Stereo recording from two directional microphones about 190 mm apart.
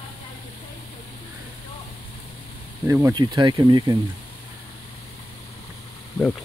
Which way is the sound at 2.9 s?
15° right (ahead or behind).